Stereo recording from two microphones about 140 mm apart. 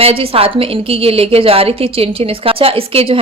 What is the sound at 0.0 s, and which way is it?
A woman's voice, 40° right (ahead or behind).